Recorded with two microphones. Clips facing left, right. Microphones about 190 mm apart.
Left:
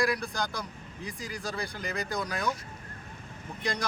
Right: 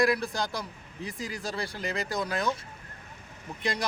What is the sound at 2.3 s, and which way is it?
Speech, 25° right (ahead or behind).